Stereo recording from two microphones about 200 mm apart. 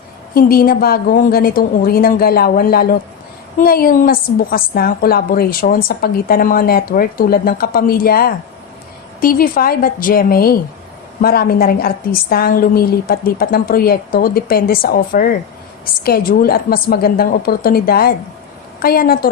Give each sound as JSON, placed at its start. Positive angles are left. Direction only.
{"t": 0.3, "sound": "a woman's voice", "side_deg": 45}